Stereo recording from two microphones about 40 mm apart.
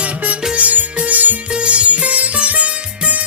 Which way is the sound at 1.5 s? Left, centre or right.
Right.